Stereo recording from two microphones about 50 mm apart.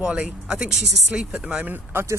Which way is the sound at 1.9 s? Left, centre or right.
Right.